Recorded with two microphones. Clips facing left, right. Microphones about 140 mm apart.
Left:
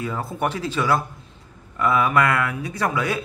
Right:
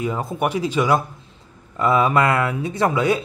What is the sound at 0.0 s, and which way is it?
Speech, 20° right (ahead or behind).